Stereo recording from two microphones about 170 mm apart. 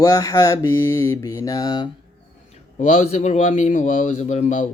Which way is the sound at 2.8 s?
45° left (ahead or behind).